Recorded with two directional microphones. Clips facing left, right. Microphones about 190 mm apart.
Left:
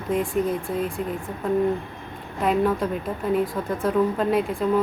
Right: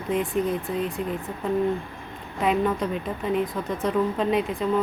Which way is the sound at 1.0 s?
5° left (ahead or behind).